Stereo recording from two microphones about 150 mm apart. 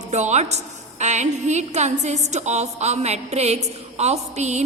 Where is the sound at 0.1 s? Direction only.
50° right (ahead or behind).